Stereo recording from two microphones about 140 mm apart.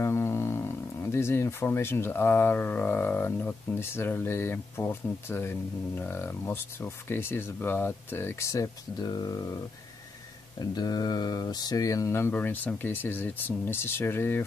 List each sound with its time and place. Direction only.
0.0 s speech: 20° left (ahead or behind)
10.7 s speech: 30° left (ahead or behind)